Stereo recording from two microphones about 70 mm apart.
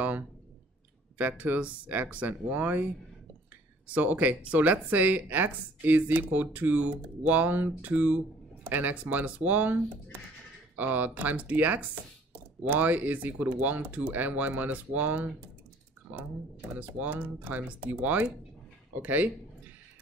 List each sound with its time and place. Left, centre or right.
1.1 s speech: right
16.7 s speech: right